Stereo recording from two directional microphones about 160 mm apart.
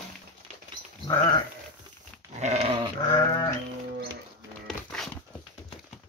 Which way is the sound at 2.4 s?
40° right (ahead or behind).